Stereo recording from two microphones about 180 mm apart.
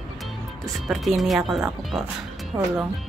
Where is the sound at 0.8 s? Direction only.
Centre (ahead or behind).